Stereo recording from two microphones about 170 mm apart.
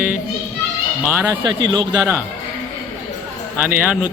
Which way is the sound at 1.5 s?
25° right (ahead or behind).